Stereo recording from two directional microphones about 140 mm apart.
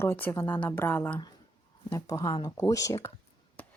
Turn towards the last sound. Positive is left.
turn(degrees=20)  # may be behind; listen again after turning